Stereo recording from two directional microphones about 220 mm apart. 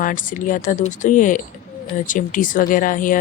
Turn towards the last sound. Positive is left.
turn(degrees=35)  # may be behind; listen again after turning